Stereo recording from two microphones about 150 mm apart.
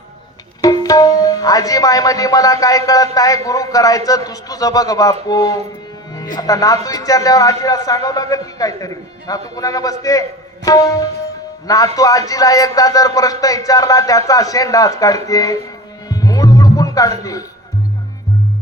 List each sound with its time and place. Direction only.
0.6 s tabla: 25° left (ahead or behind)
16.0 s music: 25° left (ahead or behind)